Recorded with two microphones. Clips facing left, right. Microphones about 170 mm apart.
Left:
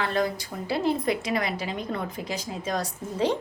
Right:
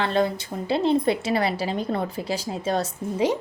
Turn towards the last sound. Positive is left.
turn(degrees=-10)  # may be behind; listen again after turning